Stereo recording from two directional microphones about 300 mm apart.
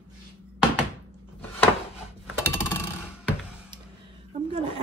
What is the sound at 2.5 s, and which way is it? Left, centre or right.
Coin, centre.